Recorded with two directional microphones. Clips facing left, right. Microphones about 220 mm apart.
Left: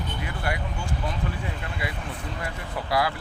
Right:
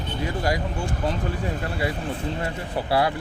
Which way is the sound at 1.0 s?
35° right (ahead or behind).